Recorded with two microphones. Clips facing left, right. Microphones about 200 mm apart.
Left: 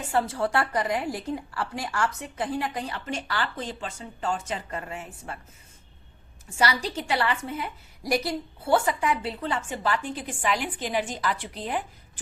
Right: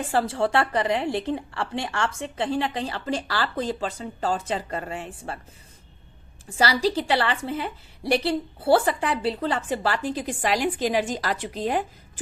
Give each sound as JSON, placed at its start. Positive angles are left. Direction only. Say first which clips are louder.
{"t": 0.0, "sound": "a woman's voice", "louder": "right 2 dB", "side_deg": -30}
{"t": 6.6, "sound": "a woman's voice", "louder": "right 4 dB", "side_deg": -30}